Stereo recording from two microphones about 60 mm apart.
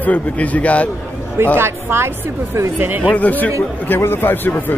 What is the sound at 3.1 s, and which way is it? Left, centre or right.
Speech, left.